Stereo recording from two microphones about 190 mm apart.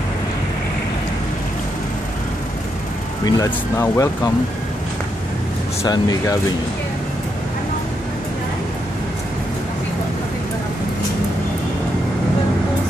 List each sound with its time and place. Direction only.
3.3 s speech: 15° left (ahead or behind)
5.9 s speech: 20° left (ahead or behind)